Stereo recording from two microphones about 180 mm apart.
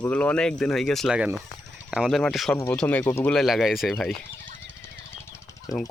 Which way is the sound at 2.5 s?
15° left (ahead or behind).